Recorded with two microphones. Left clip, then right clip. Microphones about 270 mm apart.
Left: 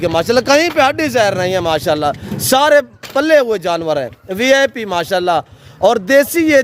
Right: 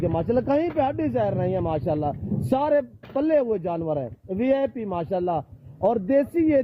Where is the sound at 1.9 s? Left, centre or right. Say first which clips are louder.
Left 11 dB; centre.